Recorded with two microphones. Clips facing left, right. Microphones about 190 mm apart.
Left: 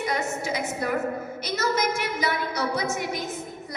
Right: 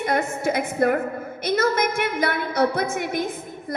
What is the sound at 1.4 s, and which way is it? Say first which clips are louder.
A woman's voice: right 5 dB; 55° right (ahead or behind).